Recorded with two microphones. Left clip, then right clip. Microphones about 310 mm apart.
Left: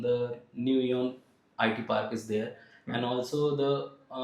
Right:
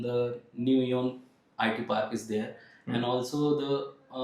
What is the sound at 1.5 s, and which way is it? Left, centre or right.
Speech, left.